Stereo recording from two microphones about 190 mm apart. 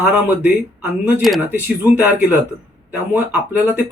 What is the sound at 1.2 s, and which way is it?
Speech, 5° right (ahead or behind).